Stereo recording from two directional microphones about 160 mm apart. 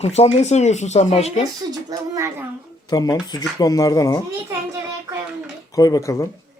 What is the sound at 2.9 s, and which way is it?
Speech, 25° left (ahead or behind).